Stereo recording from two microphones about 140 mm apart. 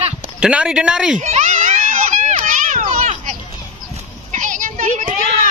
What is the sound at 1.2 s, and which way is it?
Children playing, 55° right (ahead or behind).